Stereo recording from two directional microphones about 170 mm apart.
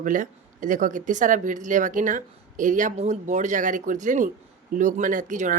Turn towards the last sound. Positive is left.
turn(degrees=-50)  # may be behind; listen again after turning